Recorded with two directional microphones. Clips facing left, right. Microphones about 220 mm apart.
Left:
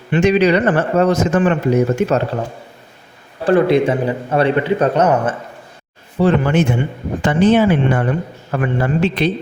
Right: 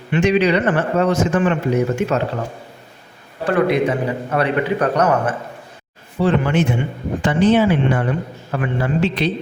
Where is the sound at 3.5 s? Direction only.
30° left (ahead or behind).